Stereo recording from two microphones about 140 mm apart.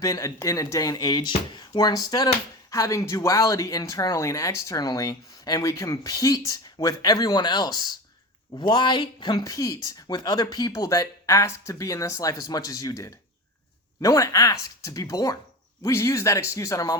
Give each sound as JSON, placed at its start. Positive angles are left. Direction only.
{"t": 0.0, "sound": "speech", "side_deg": 25}